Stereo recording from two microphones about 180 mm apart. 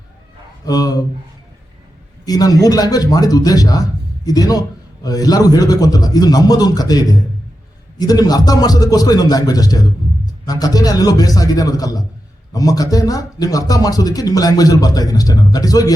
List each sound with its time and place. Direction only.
0.6 s speech: 20° left (ahead or behind)
2.2 s speech: 20° left (ahead or behind)